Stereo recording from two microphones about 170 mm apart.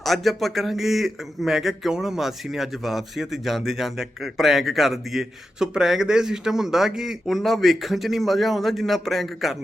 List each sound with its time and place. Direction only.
0.0 s speech: centre (ahead or behind)